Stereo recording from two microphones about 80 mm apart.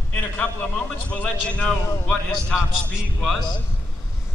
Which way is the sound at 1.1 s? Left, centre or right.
Centre.